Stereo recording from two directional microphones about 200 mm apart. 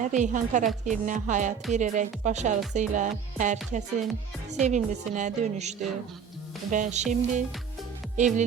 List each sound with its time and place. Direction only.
0.0 s a woman's voice: 40° right (ahead or behind)